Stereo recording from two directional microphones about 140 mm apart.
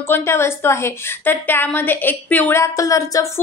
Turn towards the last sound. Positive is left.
turn(degrees=25)  # may be behind; listen again after turning